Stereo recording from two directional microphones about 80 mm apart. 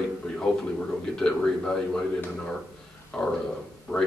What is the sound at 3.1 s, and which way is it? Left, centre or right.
Speech, centre.